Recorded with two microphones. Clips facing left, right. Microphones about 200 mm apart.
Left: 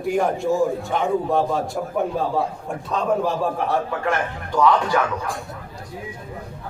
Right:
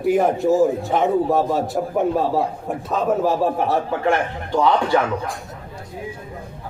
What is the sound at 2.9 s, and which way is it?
Speech, centre (ahead or behind).